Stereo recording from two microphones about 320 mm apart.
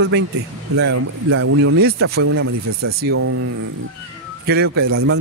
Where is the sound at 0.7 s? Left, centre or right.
Right.